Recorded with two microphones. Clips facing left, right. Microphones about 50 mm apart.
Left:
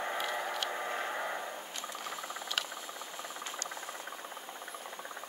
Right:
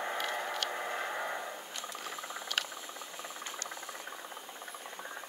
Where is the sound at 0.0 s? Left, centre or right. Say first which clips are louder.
Even; centre.